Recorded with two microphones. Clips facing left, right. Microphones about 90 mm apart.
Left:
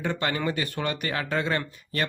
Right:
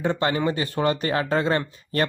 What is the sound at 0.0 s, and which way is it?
Speech, 25° right (ahead or behind).